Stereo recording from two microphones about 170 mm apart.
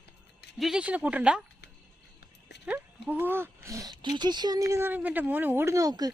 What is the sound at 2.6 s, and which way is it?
Speech, 10° right (ahead or behind).